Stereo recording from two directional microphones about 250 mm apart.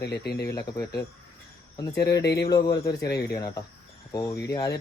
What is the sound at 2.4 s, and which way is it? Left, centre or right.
Speech, centre.